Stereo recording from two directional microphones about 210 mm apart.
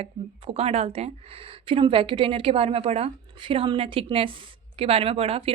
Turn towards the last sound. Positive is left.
turn(degrees=-25)  # may be behind; listen again after turning